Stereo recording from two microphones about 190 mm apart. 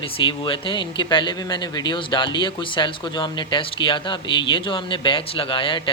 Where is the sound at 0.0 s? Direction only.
30° left (ahead or behind).